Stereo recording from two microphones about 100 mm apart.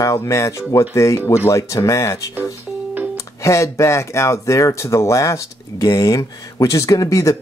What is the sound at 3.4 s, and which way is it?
Speech, 30° left (ahead or behind).